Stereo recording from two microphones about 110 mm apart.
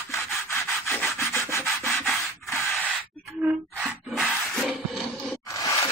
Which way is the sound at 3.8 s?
Centre (ahead or behind).